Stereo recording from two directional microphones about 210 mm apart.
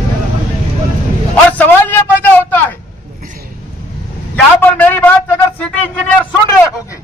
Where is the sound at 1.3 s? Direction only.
10° left (ahead or behind).